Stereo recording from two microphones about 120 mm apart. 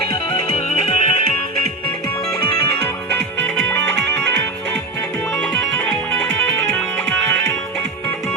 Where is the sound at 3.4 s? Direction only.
15° left (ahead or behind).